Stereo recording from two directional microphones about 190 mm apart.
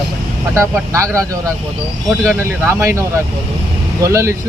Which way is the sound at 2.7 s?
15° right (ahead or behind).